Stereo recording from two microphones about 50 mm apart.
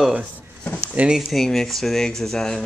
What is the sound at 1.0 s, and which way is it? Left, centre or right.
Speech, right.